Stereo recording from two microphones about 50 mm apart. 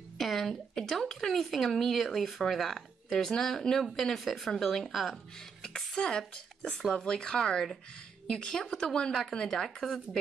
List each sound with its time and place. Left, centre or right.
0.2 s speech: centre
5.7 s speech: centre